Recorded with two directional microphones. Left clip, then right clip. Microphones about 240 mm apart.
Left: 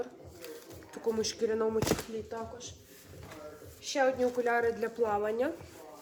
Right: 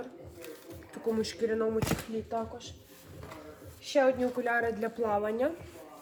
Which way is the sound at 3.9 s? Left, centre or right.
Centre.